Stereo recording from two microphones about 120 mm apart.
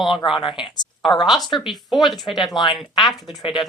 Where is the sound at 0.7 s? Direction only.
Centre (ahead or behind).